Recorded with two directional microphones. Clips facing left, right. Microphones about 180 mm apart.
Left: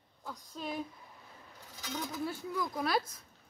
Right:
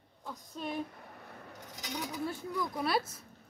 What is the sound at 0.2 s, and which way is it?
Speech, centre (ahead or behind).